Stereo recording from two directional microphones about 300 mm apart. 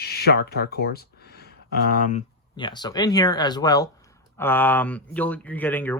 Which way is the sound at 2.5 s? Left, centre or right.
Centre.